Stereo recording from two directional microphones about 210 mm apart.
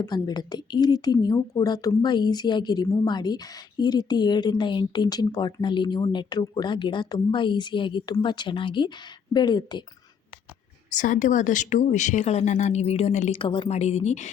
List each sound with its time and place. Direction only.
0.0 s speech: 20° left (ahead or behind)
10.9 s speech: 35° left (ahead or behind)